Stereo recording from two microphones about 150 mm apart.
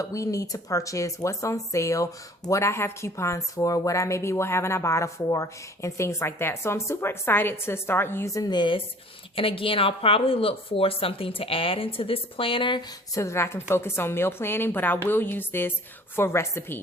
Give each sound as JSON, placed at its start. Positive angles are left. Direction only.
{"t": 0.0, "sound": "speech", "side_deg": 20}
{"t": 13.1, "sound": "speech", "side_deg": 20}